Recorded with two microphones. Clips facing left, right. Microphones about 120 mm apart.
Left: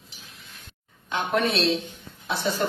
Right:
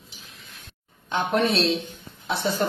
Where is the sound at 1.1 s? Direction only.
30° right (ahead or behind).